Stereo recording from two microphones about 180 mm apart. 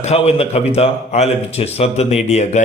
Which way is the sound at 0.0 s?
35° left (ahead or behind).